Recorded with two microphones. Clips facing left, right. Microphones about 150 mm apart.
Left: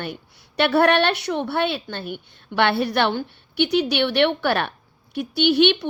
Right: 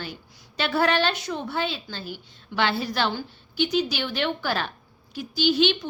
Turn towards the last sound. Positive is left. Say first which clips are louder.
# left 4 dB
turn(degrees=65)  # may be behind; listen again after turning